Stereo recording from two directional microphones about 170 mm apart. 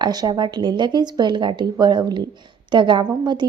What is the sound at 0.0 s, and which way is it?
A woman's voice, 25° right (ahead or behind).